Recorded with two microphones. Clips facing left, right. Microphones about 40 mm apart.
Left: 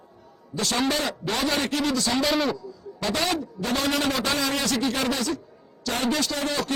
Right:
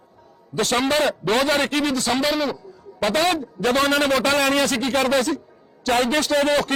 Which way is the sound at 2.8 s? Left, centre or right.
Right.